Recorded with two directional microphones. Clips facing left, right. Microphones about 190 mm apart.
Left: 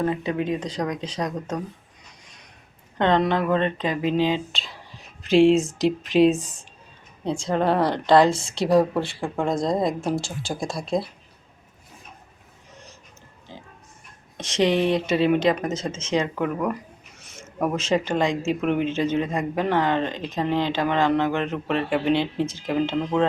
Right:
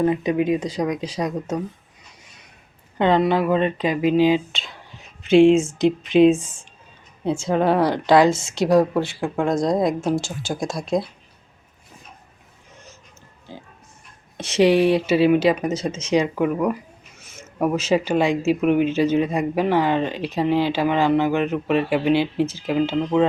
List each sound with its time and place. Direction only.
0.0 s speech: 15° right (ahead or behind)
3.0 s speech: 5° right (ahead or behind)
4.5 s whispering: centre (ahead or behind)
5.8 s speech: centre (ahead or behind)
14.3 s speech: 5° right (ahead or behind)